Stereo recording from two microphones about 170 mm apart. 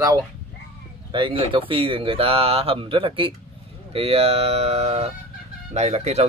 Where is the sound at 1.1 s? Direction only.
30° right (ahead or behind).